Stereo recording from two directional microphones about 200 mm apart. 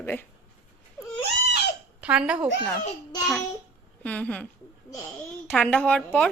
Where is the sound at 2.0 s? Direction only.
5° right (ahead or behind).